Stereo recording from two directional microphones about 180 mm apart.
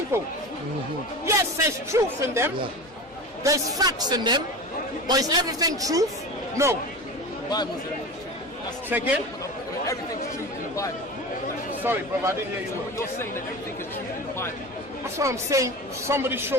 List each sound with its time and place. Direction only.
0.1 s a man's voice: 15° right (ahead or behind)
8.9 s speech: 5° right (ahead or behind)
11.8 s speech: 10° right (ahead or behind)
15.2 s speech: 15° right (ahead or behind)